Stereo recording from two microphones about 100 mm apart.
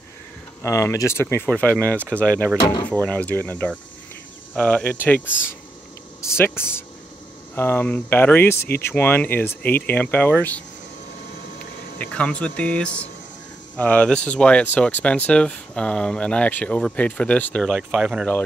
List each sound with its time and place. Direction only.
0.6 s speech: 30° left (ahead or behind)
6.2 s speech: 25° left (ahead or behind)
12.0 s speech: 10° left (ahead or behind)
17.6 s speech: centre (ahead or behind)